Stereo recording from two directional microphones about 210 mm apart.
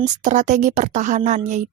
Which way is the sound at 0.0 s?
35° right (ahead or behind).